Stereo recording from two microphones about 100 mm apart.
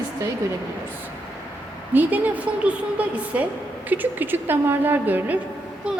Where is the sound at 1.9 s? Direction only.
20° right (ahead or behind).